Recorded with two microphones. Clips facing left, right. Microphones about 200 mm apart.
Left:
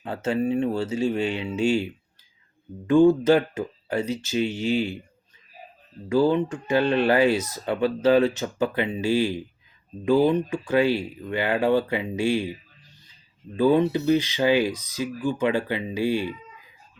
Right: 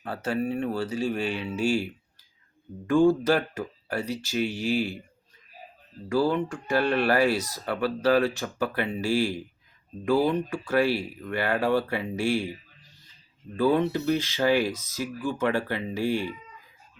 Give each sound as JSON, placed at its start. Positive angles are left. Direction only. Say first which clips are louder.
{"t": 0.0, "sound": "speech", "louder": "left 4 dB", "side_deg": 20}
{"t": 6.1, "sound": "speech", "louder": "left 4 dB", "side_deg": 20}
{"t": 13.6, "sound": "speech", "louder": "left 3 dB", "side_deg": 15}